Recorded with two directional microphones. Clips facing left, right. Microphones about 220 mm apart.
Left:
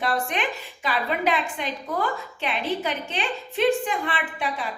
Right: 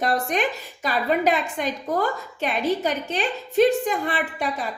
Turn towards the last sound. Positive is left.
turn(degrees=-40)  # may be behind; listen again after turning